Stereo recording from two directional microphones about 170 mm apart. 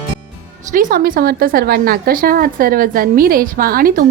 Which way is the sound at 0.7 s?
50° right (ahead or behind).